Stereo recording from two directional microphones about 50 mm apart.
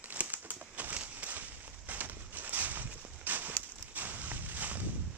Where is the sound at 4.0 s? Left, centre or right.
Right.